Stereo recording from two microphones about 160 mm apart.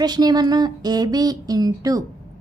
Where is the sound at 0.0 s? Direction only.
25° right (ahead or behind).